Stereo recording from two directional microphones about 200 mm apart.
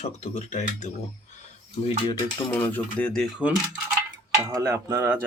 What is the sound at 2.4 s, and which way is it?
Speech, 10° left (ahead or behind).